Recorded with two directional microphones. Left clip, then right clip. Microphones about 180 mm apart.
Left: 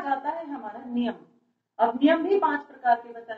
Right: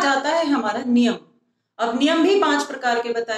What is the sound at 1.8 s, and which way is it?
A woman's voice, 20° right (ahead or behind).